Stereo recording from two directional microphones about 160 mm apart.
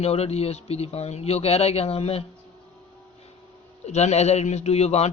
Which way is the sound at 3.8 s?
45° left (ahead or behind).